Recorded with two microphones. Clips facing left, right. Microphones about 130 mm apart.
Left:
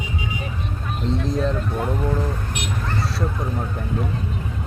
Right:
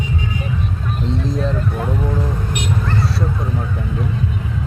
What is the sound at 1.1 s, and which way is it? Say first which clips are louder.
Speech: even; centre (ahead or behind).